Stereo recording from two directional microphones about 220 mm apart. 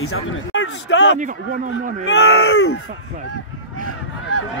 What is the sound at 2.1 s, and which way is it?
Speech, 70° left (ahead or behind).